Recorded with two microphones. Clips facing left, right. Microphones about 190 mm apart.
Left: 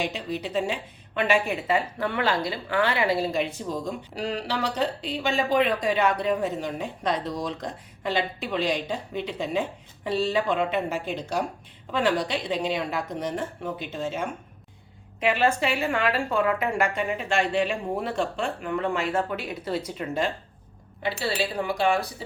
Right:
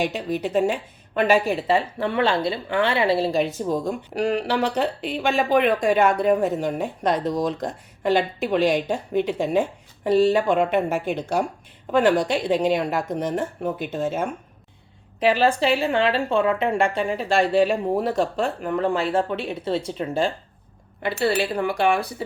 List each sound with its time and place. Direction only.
0.0 s a woman's voice: 50° right (ahead or behind); by 3.4 s 30° right (ahead or behind)
3.4 s speech: 50° right (ahead or behind)
15.2 s a woman's voice: 35° right (ahead or behind)
21.0 s speech: 55° right (ahead or behind)